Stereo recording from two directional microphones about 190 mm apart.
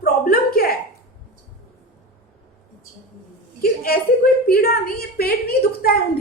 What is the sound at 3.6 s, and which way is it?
A woman's voice, 50° left (ahead or behind).